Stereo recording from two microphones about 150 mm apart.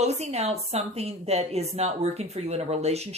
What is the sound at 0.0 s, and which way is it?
A woman's voice, 45° right (ahead or behind).